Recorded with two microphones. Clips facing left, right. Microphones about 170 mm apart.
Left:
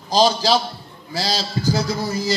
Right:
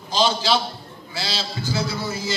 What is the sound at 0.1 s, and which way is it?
Speech, 40° left (ahead or behind).